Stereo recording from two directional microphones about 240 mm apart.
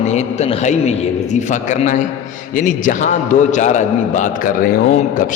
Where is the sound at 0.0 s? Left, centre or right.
Left.